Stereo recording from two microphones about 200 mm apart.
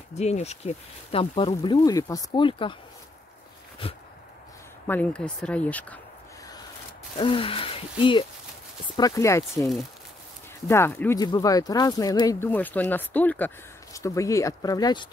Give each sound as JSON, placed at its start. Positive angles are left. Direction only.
{"t": 0.2, "sound": "speech", "side_deg": 35}
{"t": 4.8, "sound": "speech", "side_deg": 10}
{"t": 7.2, "sound": "speech", "side_deg": 25}
{"t": 9.6, "sound": "speech", "side_deg": 0}
{"t": 10.7, "sound": "speech", "side_deg": 10}